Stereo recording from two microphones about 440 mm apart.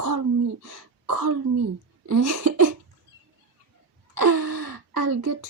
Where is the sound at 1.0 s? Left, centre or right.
Right.